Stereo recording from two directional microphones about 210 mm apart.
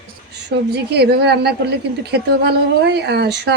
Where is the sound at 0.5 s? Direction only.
50° right (ahead or behind).